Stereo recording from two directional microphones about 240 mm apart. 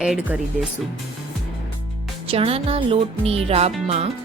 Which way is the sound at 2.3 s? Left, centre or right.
Right.